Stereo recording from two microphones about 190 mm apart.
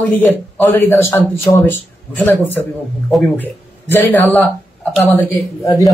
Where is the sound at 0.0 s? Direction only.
10° left (ahead or behind).